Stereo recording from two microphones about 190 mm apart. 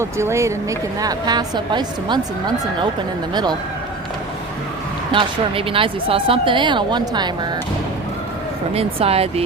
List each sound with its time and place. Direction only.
0.0 s a woman's voice: 15° right (ahead or behind)
5.1 s a woman's voice: 30° right (ahead or behind)
8.7 s speech: 30° right (ahead or behind)